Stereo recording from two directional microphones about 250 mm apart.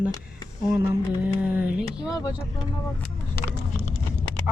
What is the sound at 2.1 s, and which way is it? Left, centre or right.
Speech, centre.